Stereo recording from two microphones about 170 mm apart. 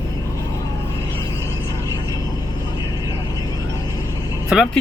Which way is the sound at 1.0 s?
20° left (ahead or behind).